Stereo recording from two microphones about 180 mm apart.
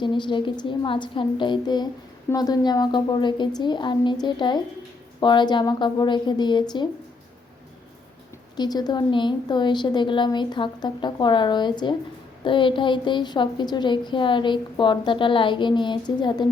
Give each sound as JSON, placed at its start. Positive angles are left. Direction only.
{"t": 0.0, "sound": "a woman's voice", "side_deg": 25}
{"t": 8.5, "sound": "a woman's voice", "side_deg": 20}